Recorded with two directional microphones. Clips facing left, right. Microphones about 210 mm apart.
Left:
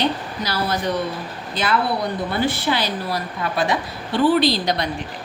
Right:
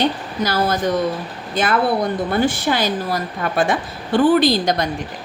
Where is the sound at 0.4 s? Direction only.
45° right (ahead or behind).